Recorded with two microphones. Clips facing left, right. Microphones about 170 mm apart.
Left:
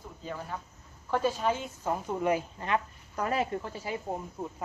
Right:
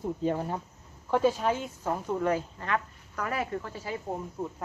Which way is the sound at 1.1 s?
10° right (ahead or behind).